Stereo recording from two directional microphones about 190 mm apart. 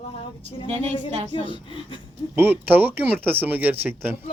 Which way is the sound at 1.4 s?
25° left (ahead or behind).